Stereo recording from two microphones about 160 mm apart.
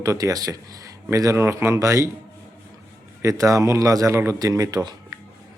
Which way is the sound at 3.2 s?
20° right (ahead or behind).